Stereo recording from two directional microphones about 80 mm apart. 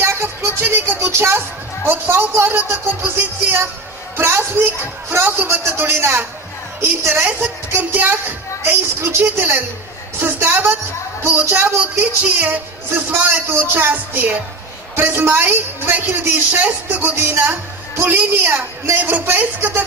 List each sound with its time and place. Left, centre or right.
0.0 s music: right
1.9 s a woman's voice: right